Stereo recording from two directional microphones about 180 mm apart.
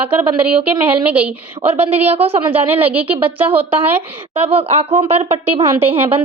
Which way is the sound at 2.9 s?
10° right (ahead or behind).